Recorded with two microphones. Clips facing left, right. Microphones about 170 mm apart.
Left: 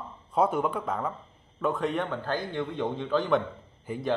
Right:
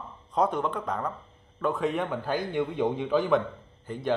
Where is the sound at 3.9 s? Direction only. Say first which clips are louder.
Left 2 dB; 10° left (ahead or behind).